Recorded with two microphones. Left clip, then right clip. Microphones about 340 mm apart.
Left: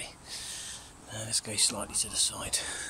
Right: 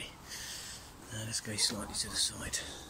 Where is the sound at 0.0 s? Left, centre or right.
Centre.